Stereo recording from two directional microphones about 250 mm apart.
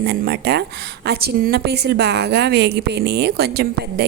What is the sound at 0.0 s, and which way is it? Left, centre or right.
A woman's voice, right.